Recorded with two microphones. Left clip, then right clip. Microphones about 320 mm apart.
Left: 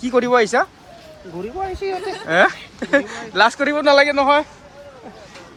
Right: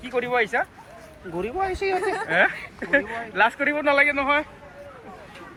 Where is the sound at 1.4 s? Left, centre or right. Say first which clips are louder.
Even; right.